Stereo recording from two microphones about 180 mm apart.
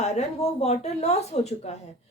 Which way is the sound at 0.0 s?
40° left (ahead or behind).